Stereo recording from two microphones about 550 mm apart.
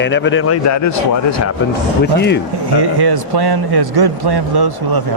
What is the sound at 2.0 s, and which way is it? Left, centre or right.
Speech, centre.